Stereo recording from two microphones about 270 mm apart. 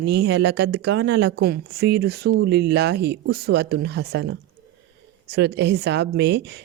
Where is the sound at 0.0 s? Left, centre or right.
Right.